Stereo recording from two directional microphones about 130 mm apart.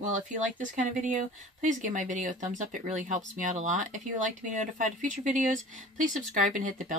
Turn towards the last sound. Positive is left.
turn(degrees=-80)